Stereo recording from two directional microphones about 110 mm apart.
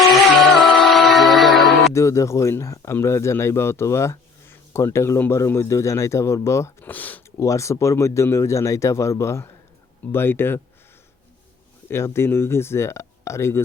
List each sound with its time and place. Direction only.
0.0 s music: centre (ahead or behind)
1.9 s speech: 25° left (ahead or behind)
7.3 s speech: 30° left (ahead or behind)
11.9 s speech: 25° left (ahead or behind)